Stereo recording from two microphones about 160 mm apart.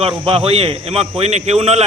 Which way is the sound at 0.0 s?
35° right (ahead or behind).